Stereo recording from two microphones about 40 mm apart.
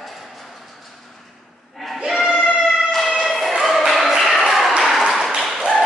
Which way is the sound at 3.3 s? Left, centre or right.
Centre.